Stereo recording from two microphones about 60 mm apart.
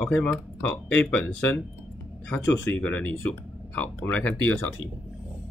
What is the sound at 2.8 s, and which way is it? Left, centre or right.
Speech, left.